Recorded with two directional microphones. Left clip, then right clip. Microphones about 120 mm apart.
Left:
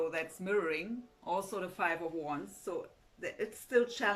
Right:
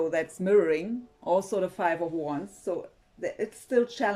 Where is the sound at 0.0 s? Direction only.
60° right (ahead or behind).